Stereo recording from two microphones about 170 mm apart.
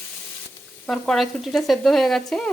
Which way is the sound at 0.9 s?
Centre (ahead or behind).